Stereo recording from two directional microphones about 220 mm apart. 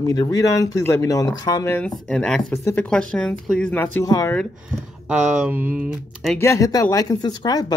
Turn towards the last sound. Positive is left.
turn(degrees=20)  # may be behind; listen again after turning